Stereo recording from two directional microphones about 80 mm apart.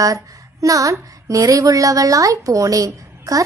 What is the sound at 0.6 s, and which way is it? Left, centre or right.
A woman's voice, right.